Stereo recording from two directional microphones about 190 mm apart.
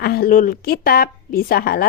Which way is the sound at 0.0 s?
55° left (ahead or behind).